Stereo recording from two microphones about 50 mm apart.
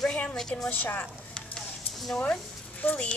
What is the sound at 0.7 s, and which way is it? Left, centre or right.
Speech, left.